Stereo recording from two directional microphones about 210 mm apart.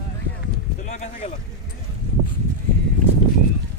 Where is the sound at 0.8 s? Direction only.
35° left (ahead or behind).